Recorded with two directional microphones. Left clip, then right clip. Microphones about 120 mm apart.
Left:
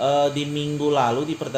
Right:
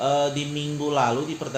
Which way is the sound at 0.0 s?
70° left (ahead or behind).